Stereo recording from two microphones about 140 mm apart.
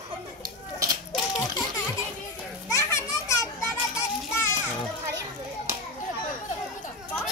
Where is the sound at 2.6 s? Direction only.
20° left (ahead or behind).